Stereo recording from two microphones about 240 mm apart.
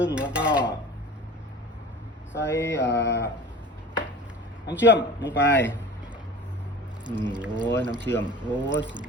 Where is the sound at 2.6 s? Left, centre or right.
Left.